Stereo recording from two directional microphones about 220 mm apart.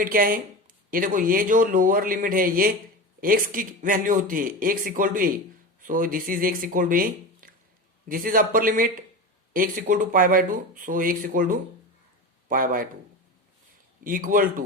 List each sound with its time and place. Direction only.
0.0 s speech: 40° right (ahead or behind)
14.0 s speech: 40° right (ahead or behind)